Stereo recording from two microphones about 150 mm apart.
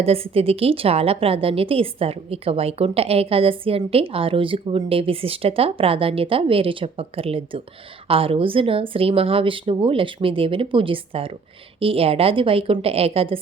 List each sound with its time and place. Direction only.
0.0 s a woman's voice: 40° right (ahead or behind)